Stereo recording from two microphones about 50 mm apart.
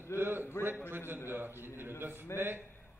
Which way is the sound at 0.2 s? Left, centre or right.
Right.